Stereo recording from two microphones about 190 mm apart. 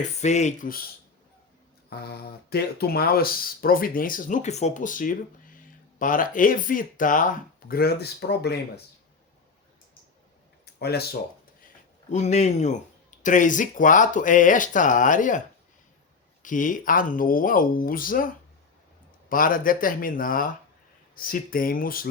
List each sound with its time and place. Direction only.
0.2 s speech: 35° left (ahead or behind)
1.9 s speech: 55° left (ahead or behind)
10.8 s speech: 55° left (ahead or behind)
12.1 s speech: 35° left (ahead or behind)